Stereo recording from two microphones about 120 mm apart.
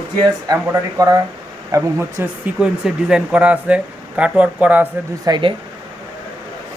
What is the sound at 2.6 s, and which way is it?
Speech, 5° right (ahead or behind).